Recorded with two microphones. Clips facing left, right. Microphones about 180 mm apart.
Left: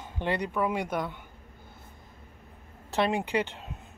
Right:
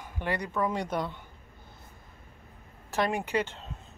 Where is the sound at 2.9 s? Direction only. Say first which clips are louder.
Left 2 dB; 20° left (ahead or behind).